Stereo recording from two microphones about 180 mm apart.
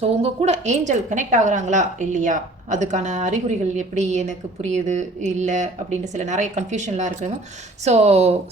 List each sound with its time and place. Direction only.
0.0 s a woman's voice: 35° right (ahead or behind)